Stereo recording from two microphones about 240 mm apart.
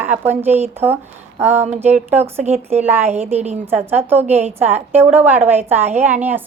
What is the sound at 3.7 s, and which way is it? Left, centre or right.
A woman's voice, centre.